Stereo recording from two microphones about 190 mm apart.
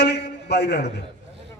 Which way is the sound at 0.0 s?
60° left (ahead or behind).